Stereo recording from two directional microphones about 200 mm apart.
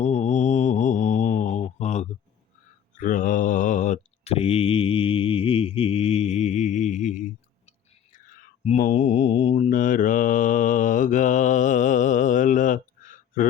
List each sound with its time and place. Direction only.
0.0 s mantra: 35° left (ahead or behind)
8.6 s mantra: 35° left (ahead or behind)